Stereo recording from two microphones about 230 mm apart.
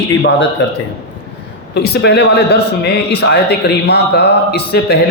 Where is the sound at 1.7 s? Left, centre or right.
Left.